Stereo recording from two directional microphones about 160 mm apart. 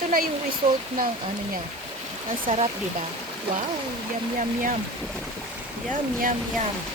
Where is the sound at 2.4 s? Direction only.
40° right (ahead or behind).